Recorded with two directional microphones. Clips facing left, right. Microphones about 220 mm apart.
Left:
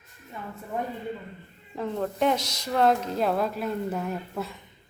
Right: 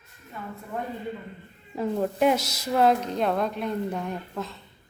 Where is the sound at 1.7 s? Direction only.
10° right (ahead or behind); by 4.6 s 10° left (ahead or behind).